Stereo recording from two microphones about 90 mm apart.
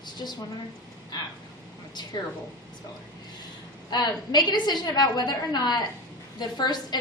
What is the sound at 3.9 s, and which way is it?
A woman's voice, 55° left (ahead or behind).